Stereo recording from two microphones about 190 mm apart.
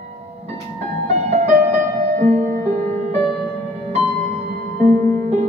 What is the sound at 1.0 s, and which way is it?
Music, 35° right (ahead or behind).